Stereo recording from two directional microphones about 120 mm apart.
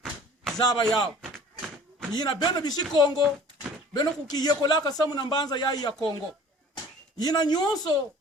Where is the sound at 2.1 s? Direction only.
35° left (ahead or behind).